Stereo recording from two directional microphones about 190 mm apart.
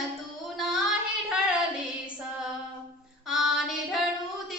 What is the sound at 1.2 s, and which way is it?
Female singing, 5° right (ahead or behind).